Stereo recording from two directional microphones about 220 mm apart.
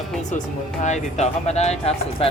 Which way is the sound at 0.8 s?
30° left (ahead or behind).